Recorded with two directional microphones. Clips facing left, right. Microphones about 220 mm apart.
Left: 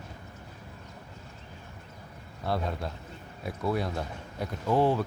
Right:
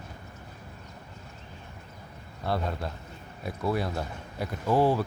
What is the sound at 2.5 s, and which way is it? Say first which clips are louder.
Speech: right 1 dB; centre (ahead or behind).